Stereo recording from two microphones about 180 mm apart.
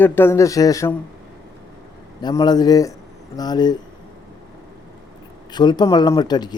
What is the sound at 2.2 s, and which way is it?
A man's voice, 20° left (ahead or behind).